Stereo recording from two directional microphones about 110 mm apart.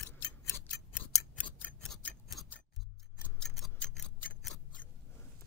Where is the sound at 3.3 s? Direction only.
Centre (ahead or behind).